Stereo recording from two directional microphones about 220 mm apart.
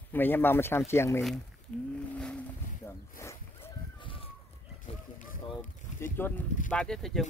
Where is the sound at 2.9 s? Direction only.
10° left (ahead or behind).